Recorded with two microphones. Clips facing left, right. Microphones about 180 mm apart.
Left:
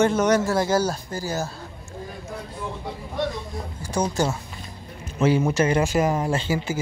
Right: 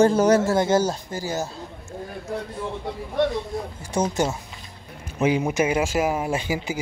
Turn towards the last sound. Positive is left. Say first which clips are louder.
# left 1 dB
turn(degrees=-15)  # may be behind; listen again after turning